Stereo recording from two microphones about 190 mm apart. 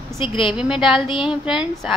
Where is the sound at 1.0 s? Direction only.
25° left (ahead or behind).